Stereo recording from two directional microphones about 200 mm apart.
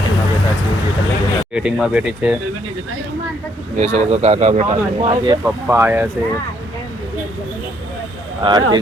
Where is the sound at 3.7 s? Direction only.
35° right (ahead or behind).